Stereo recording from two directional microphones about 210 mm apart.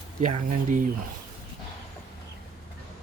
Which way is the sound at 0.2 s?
35° right (ahead or behind).